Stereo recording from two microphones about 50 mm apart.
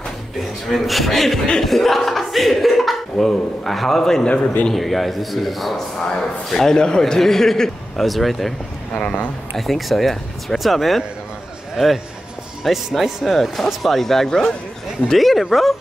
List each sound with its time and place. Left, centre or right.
0.4 s speech: centre
4.3 s speech: left
4.6 s a man's voice: centre
8.9 s speech: left
9.6 s a man's voice: centre